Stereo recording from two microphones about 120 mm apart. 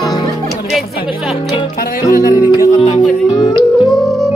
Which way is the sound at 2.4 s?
40° left (ahead or behind).